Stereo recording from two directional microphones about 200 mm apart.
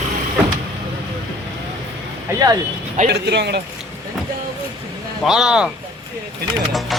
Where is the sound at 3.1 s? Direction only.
55° right (ahead or behind).